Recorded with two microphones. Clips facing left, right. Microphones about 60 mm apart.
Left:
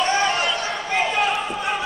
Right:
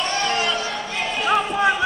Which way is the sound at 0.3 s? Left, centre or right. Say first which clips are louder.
Even; centre.